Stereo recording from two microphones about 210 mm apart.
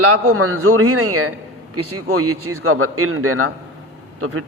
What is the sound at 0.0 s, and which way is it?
Speech, 90° right.